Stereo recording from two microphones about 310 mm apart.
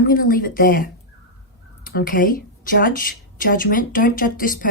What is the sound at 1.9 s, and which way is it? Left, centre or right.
A woman's voice, left.